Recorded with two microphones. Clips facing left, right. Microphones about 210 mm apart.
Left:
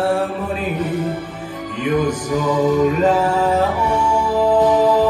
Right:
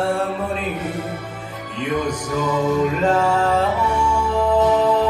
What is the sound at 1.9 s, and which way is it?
Music, 5° left (ahead or behind).